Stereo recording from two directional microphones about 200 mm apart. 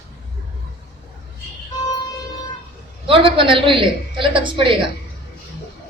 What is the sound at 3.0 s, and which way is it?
A woman's voice, 25° right (ahead or behind).